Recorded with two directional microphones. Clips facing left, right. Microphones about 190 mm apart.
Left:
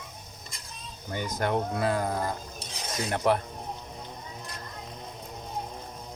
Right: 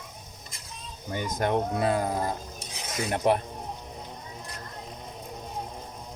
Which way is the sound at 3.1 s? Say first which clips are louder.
Right 1 dB; 20° right (ahead or behind).